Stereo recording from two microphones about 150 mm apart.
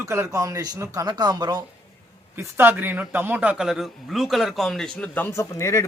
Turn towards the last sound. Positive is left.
turn(degrees=20)  # may be behind; listen again after turning